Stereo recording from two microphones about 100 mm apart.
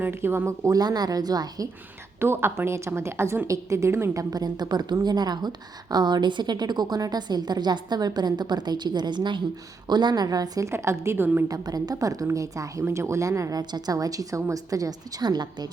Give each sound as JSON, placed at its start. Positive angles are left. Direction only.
{"t": 0.0, "sound": "a woman's voice", "side_deg": -20}
{"t": 2.2, "sound": "a woman's voice", "side_deg": -25}
{"t": 11.4, "sound": "a woman's voice", "side_deg": -35}
{"t": 13.6, "sound": "a woman's voice", "side_deg": -45}